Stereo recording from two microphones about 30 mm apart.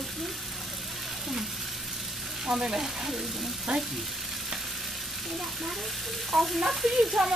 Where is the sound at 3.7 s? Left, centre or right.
Right.